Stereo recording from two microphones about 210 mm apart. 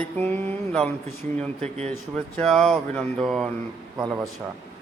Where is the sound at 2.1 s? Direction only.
5° left (ahead or behind).